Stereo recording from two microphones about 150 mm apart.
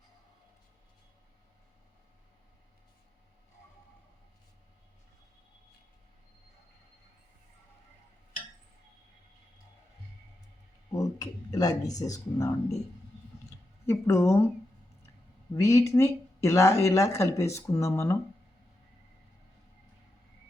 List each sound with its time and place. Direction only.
10.9 s speech: 25° left (ahead or behind)
13.8 s speech: 15° left (ahead or behind)
15.5 s speech: 20° left (ahead or behind)